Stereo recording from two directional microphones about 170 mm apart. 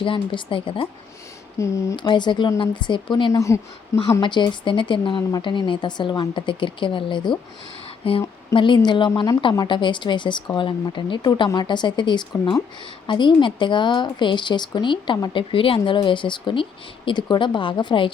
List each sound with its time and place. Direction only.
0.0 s speech: 30° left (ahead or behind)
1.5 s speech: 15° left (ahead or behind)